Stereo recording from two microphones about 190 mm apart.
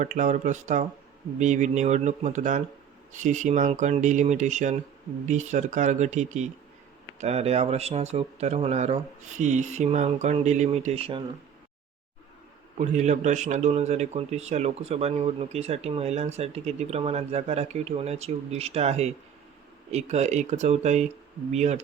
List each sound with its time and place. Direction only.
0.0 s a man's voice: 40° right (ahead or behind)
12.7 s a man's voice: 40° right (ahead or behind)